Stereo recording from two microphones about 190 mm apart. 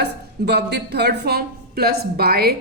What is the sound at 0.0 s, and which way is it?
A woman's voice, 60° right (ahead or behind).